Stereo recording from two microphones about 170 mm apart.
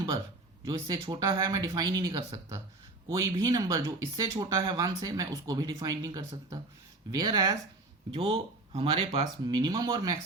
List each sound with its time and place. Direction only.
0.6 s speech: 20° right (ahead or behind)